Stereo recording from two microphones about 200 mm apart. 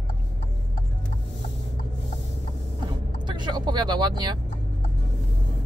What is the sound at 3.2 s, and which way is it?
Vehicle, 20° right (ahead or behind).